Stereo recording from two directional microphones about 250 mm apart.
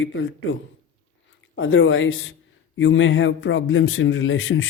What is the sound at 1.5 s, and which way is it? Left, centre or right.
Speech, left.